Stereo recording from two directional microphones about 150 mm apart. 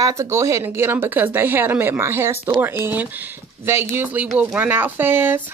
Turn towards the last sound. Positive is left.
turn(degrees=-15)  # may be behind; listen again after turning